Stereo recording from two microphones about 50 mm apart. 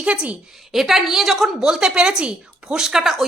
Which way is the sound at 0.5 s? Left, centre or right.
Centre.